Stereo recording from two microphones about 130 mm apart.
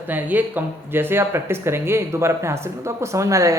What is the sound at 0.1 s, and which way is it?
A man's voice, 15° right (ahead or behind).